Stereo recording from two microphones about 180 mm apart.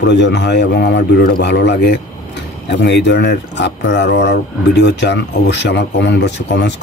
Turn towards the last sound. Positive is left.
turn(degrees=75)  # may be behind; listen again after turning